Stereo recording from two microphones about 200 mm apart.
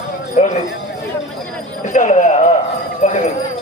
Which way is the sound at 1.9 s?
40° left (ahead or behind).